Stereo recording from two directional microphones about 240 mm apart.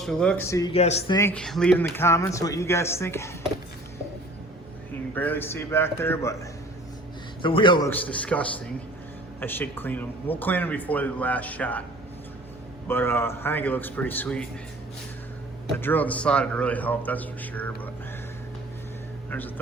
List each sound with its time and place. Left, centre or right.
0.0 s speech: centre
0.7 s a man's voice: left
1.1 s speech: centre
5.1 s speech: centre
7.4 s a man's voice: centre
7.9 s speech: centre
12.9 s speech: centre
15.8 s speech: centre